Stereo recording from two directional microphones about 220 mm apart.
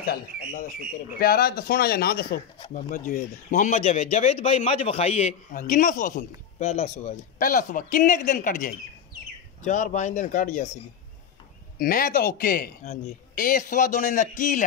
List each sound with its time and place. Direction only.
0.0 s a man's voice: 40° left (ahead or behind)
11.8 s a man's voice: 40° left (ahead or behind)